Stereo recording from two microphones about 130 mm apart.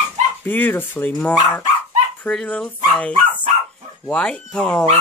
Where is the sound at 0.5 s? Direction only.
15° left (ahead or behind).